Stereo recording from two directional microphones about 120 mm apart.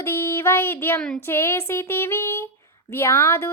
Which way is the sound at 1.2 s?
20° left (ahead or behind).